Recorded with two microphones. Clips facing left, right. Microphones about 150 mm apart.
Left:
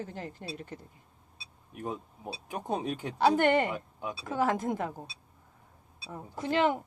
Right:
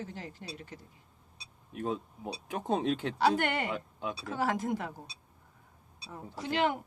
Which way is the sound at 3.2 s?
45° left (ahead or behind).